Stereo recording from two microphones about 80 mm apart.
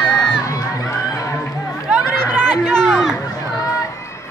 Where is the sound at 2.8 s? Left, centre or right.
Centre.